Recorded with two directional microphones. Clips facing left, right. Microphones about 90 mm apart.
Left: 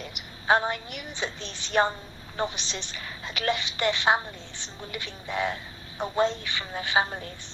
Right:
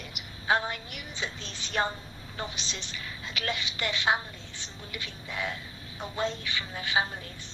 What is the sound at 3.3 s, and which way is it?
A woman's voice, 40° left (ahead or behind).